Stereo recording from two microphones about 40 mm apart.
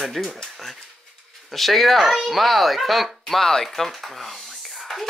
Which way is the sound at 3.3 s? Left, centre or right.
Centre.